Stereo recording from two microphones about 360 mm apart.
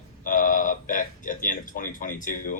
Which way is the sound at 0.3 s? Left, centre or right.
Left.